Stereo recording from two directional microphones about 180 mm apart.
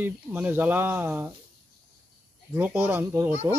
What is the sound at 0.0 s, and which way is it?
Speech, 10° right (ahead or behind).